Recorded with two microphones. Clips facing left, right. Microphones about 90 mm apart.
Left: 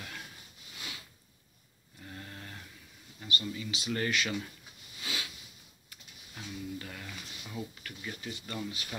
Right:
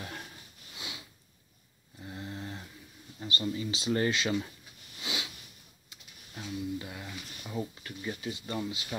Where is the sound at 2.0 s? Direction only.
20° right (ahead or behind).